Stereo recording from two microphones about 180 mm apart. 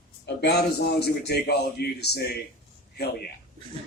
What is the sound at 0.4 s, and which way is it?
A man's voice, 65° left (ahead or behind).